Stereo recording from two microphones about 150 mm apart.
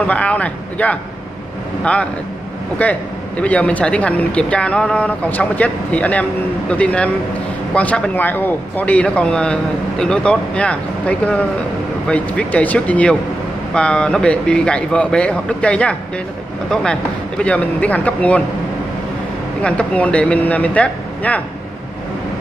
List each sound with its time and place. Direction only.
0.0 s speech: 10° left (ahead or behind)
2.8 s speech: 10° left (ahead or behind)
19.6 s speech: 5° left (ahead or behind)